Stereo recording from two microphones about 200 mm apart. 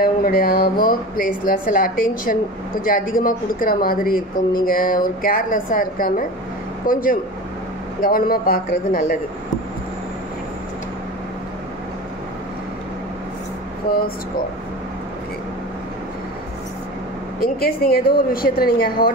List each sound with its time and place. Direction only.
0.0 s speech: 45° left (ahead or behind)
17.4 s speech: 50° left (ahead or behind)